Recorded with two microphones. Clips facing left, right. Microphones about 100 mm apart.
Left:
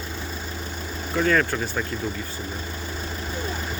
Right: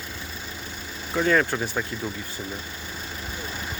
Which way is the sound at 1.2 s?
20° right (ahead or behind).